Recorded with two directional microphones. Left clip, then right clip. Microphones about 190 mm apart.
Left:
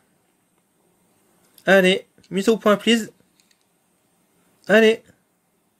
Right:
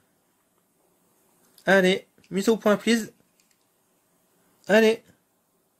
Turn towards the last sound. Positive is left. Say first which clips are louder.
# left 4 dB
turn(degrees=5)  # may be behind; listen again after turning